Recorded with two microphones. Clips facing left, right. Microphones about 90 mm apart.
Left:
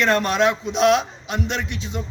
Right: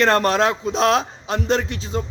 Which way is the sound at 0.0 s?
40° right (ahead or behind).